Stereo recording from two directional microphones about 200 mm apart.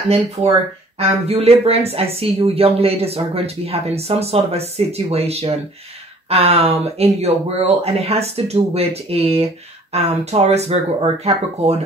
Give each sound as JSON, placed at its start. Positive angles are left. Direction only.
{"t": 0.9, "sound": "speech", "side_deg": -30}